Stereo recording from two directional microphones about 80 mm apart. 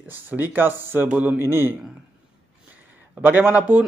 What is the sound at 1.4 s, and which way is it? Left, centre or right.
Speech, right.